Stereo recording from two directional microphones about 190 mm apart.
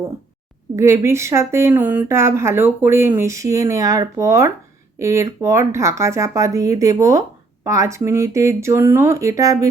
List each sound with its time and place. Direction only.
0.8 s speech: 15° right (ahead or behind)